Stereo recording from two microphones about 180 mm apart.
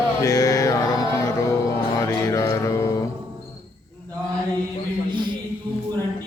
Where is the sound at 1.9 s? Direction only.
15° left (ahead or behind).